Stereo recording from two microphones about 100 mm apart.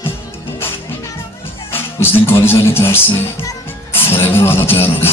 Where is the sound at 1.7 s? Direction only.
25° left (ahead or behind).